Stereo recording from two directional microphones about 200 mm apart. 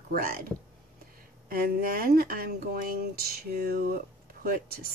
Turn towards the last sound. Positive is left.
turn(degrees=-50)  # may be behind; listen again after turning